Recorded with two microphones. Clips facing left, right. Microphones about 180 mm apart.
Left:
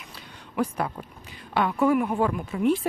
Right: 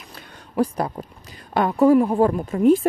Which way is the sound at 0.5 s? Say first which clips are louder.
Right 5 dB; 35° right (ahead or behind).